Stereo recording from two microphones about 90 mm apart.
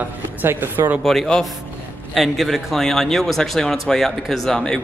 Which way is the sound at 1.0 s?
5° left (ahead or behind).